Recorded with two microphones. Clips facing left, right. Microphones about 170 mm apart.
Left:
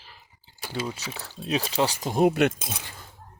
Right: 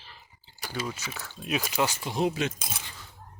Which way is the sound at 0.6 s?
30° left (ahead or behind).